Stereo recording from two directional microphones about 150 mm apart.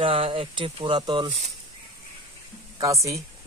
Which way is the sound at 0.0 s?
35° right (ahead or behind).